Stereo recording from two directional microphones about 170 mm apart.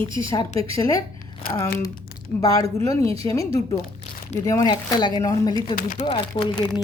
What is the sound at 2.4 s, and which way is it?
Speech, 20° left (ahead or behind).